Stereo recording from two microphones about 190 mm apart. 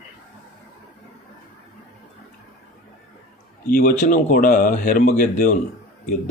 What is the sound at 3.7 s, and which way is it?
Speech, 45° left (ahead or behind).